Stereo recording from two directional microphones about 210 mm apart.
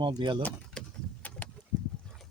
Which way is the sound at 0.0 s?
20° right (ahead or behind).